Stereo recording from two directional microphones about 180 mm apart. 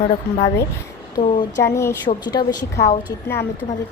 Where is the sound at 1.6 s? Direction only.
15° left (ahead or behind).